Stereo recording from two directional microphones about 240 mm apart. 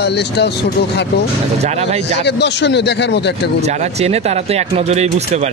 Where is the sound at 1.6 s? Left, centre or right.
Right.